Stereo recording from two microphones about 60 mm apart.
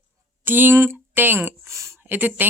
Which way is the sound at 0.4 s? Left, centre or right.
Right.